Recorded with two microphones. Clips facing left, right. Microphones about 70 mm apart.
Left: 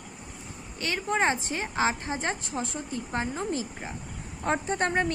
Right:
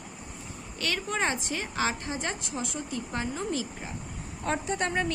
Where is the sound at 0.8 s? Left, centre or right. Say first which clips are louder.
Left 3 dB; left.